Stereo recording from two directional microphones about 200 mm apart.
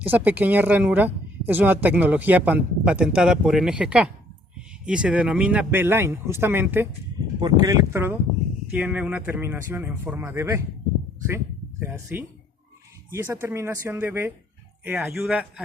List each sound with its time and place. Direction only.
0.0 s speech: 10° right (ahead or behind)
7.3 s speech: 20° right (ahead or behind)
11.8 s a man's voice: 10° right (ahead or behind)